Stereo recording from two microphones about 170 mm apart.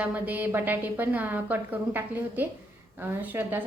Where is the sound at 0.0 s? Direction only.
10° right (ahead or behind).